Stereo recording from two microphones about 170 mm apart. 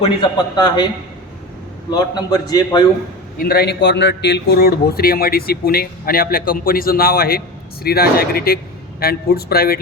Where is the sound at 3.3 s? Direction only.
65° left (ahead or behind).